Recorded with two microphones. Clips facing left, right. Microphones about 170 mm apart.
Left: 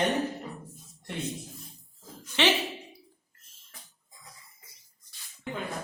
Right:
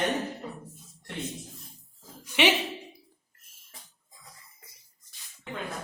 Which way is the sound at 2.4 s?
15° right (ahead or behind).